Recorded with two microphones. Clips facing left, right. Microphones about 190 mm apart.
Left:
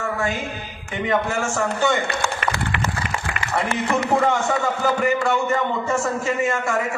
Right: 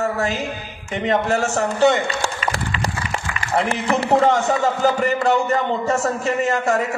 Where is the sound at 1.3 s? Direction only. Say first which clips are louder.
Right 3 dB; 40° right (ahead or behind).